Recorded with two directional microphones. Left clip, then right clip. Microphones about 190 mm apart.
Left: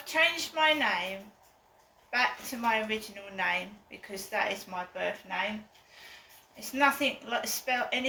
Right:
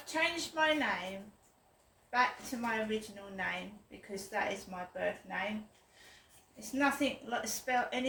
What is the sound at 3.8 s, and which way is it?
Speech, 15° right (ahead or behind).